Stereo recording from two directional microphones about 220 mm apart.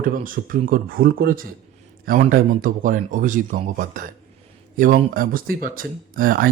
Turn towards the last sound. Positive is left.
turn(degrees=-40)  # may be behind; listen again after turning